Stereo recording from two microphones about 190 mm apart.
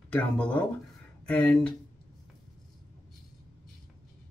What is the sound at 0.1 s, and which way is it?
Speech, 5° left (ahead or behind).